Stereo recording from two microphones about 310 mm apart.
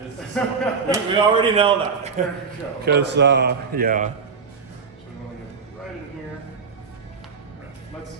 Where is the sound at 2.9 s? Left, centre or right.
Right.